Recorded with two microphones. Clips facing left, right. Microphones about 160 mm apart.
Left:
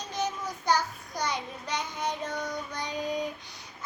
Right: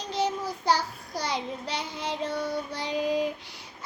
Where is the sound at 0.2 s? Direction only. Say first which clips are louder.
Right 4 dB; 30° right (ahead or behind).